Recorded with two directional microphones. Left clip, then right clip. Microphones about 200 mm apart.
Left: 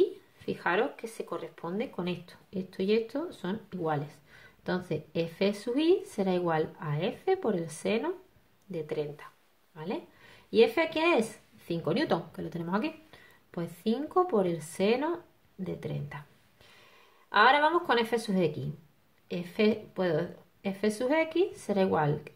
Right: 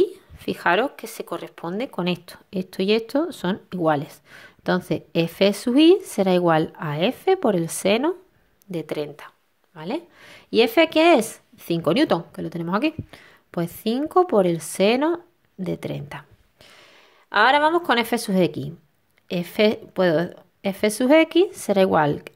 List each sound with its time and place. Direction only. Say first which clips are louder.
0.0 s speech: right 6 dB; 45° right (ahead or behind)